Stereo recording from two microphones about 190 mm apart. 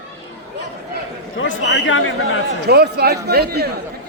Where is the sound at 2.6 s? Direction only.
60° right (ahead or behind).